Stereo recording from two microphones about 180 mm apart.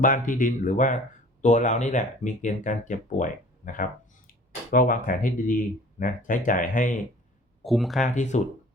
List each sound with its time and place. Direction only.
0.0 s speech: 50° left (ahead or behind)
7.6 s speech: centre (ahead or behind)
8.0 s speech: 45° left (ahead or behind)